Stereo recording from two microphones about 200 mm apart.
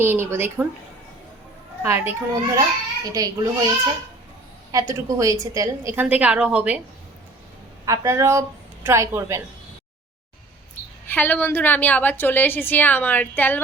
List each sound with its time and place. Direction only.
0.0 s a woman's voice: 10° right (ahead or behind)
1.8 s a woman's voice: 10° right (ahead or behind)
4.7 s a woman's voice: 15° right (ahead or behind)
7.9 s a woman's voice: 15° right (ahead or behind)
11.1 s a woman's voice: 10° left (ahead or behind)